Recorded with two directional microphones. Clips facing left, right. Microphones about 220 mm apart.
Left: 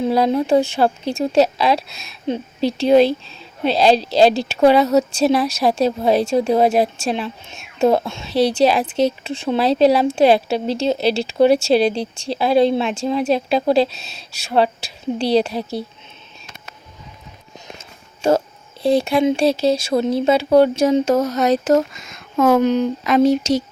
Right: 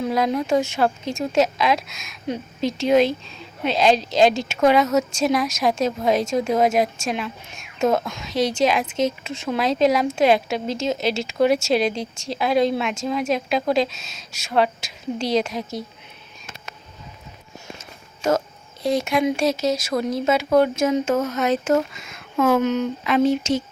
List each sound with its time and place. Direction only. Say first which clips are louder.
0.0 s speech: left 5 dB; 30° left (ahead or behind)
18.2 s speech: left 4 dB; 30° left (ahead or behind)